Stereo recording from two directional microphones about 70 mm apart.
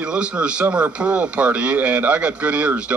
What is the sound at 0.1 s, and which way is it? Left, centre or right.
Speech, centre.